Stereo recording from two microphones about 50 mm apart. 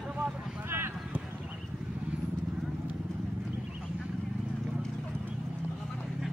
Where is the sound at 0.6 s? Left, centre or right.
Right.